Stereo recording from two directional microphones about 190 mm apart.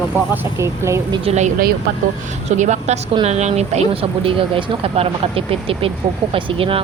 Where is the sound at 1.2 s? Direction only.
35° right (ahead or behind).